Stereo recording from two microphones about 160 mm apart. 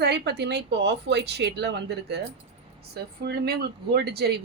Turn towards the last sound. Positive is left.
turn(degrees=-90)